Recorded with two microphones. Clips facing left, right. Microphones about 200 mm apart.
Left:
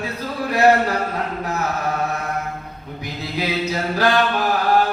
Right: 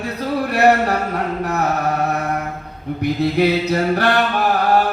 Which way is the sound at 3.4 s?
65° right (ahead or behind).